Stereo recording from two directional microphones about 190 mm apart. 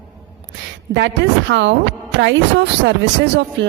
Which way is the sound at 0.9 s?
70° right (ahead or behind).